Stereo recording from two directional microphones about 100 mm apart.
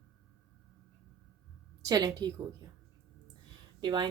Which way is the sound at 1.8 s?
40° right (ahead or behind).